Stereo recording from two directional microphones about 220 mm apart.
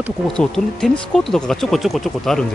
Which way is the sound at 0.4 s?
5° left (ahead or behind).